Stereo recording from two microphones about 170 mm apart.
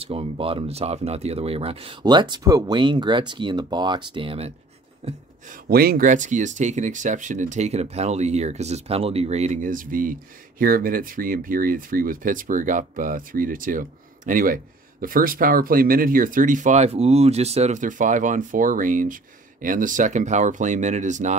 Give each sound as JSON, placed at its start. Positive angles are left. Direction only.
{"t": 0.0, "sound": "speech", "side_deg": -35}
{"t": 5.7, "sound": "speech", "side_deg": -65}